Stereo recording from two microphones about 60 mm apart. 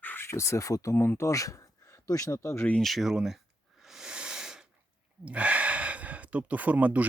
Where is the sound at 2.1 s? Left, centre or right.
Left.